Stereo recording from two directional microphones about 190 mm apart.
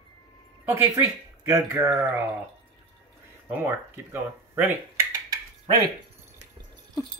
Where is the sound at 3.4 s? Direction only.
10° right (ahead or behind).